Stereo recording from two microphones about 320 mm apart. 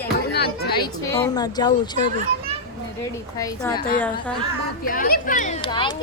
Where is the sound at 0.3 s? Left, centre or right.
Left.